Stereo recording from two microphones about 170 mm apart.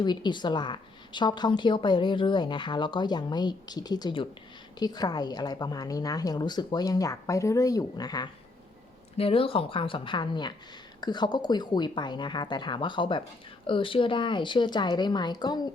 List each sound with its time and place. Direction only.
0.0 s a woman's voice: 25° left (ahead or behind)